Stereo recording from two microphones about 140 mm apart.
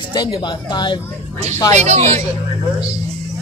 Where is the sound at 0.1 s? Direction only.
35° left (ahead or behind).